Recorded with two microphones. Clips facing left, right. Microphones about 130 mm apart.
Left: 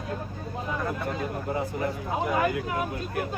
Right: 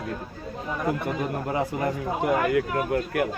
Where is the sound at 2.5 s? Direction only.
65° right (ahead or behind).